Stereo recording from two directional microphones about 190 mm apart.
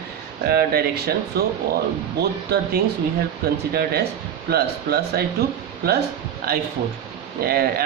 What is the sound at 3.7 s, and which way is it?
Speech, 55° right (ahead or behind).